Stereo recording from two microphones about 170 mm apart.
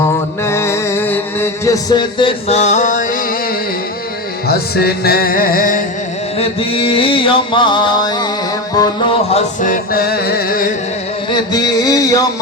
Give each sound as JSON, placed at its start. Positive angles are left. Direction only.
{"t": 0.4, "sound": "music", "side_deg": 15}
{"t": 4.4, "sound": "music", "side_deg": 65}
{"t": 6.3, "sound": "mantra", "side_deg": 35}
{"t": 9.6, "sound": "music", "side_deg": 50}
{"t": 11.3, "sound": "a sound", "side_deg": 25}